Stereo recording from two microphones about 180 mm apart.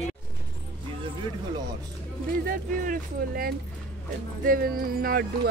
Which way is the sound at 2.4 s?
50° right (ahead or behind).